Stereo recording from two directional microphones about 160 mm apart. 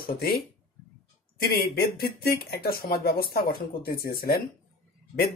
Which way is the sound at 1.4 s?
75° left (ahead or behind).